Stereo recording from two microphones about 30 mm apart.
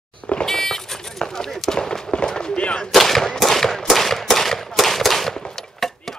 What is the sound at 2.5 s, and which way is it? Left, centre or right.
Gunshot, left.